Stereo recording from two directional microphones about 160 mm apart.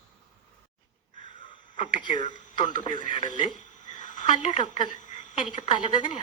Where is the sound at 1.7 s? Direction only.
35° left (ahead or behind).